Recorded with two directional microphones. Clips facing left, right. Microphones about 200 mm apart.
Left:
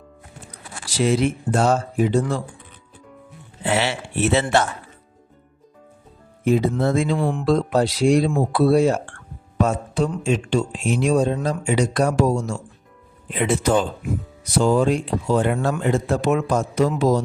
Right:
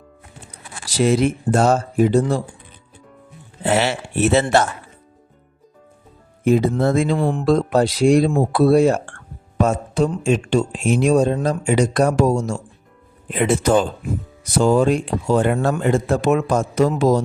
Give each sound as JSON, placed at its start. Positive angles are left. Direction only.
{"t": 0.9, "sound": "speech", "side_deg": -45}
{"t": 3.6, "sound": "speech", "side_deg": -45}
{"t": 6.4, "sound": "speech", "side_deg": -50}